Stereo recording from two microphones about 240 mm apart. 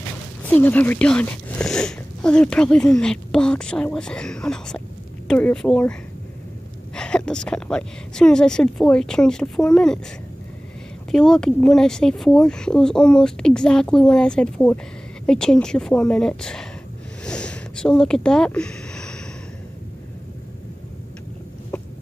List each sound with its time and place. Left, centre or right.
0.4 s speech: centre
7.0 s speech: centre
11.1 s speech: centre
17.2 s a sound: centre